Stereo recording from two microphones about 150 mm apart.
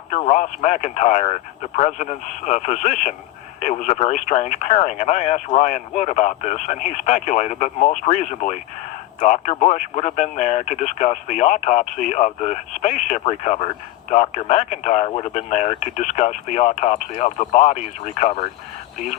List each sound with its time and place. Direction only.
0.1 s speech: 45° left (ahead or behind)